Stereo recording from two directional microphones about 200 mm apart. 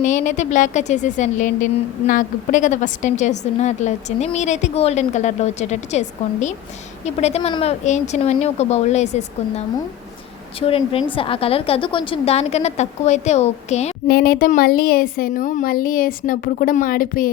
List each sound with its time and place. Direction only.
0.0 s a woman's voice: 40° left (ahead or behind)
10.7 s a woman's voice: 30° left (ahead or behind)
14.1 s a woman's voice: 50° left (ahead or behind)